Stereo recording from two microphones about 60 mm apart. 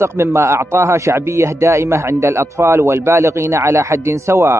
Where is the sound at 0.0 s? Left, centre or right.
Right.